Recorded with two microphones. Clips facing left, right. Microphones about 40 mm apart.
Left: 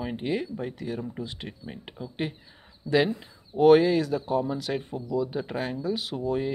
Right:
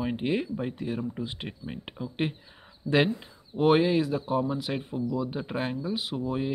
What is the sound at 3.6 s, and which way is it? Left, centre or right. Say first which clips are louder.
Speech: left 4 dB; centre.